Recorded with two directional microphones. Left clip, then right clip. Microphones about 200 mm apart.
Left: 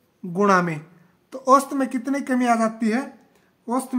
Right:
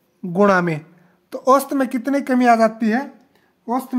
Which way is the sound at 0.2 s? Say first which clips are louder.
Right 3 dB; 40° right (ahead or behind).